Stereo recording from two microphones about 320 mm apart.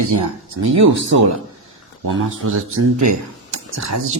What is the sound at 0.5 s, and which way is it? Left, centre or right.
Speech, right.